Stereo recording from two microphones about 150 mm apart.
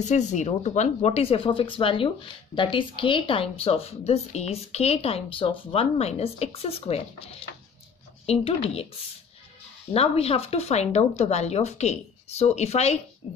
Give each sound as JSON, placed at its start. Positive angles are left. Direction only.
{"t": 0.0, "sound": "a woman's voice", "side_deg": 50}
{"t": 8.3, "sound": "a woman's voice", "side_deg": 40}
{"t": 9.9, "sound": "speech", "side_deg": 40}